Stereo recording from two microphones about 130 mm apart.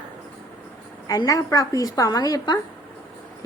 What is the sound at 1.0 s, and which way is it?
A woman's voice, 30° left (ahead or behind).